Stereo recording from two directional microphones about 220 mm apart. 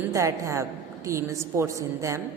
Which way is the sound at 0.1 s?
15° right (ahead or behind).